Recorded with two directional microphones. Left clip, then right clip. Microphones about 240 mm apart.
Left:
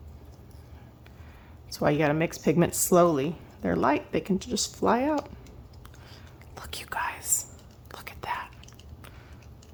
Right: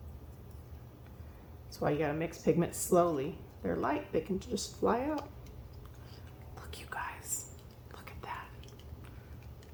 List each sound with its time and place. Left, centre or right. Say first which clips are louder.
1.7 s speech: left 8 dB; left
6.5 s whispering: left 9 dB; left